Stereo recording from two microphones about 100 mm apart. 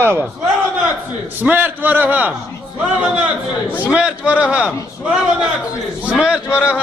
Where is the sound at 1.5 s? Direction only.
20° right (ahead or behind).